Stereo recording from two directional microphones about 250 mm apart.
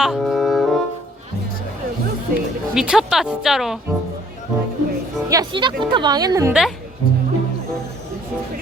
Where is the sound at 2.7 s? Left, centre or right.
Centre.